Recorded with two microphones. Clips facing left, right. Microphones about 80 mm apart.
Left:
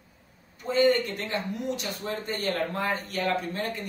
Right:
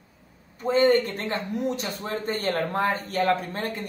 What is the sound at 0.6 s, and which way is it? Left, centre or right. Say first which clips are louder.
Speech: right 3 dB; right.